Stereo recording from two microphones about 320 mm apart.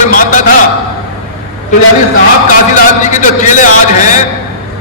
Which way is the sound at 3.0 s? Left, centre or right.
Left.